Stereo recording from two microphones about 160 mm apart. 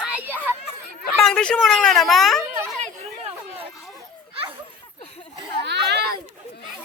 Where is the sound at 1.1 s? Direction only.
5° left (ahead or behind).